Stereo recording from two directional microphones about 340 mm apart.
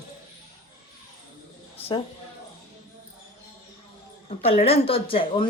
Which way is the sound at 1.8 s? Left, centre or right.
Centre.